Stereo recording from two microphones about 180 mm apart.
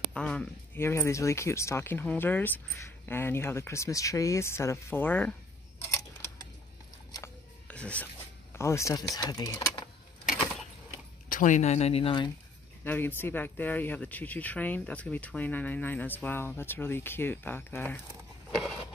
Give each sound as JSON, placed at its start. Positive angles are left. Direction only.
{"t": 0.1, "sound": "speech", "side_deg": 5}
{"t": 5.8, "sound": "a sound", "side_deg": 15}
{"t": 7.6, "sound": "a sound", "side_deg": 5}
{"t": 8.5, "sound": "speech", "side_deg": 15}
{"t": 11.2, "sound": "speech", "side_deg": 45}
{"t": 12.8, "sound": "speech", "side_deg": 10}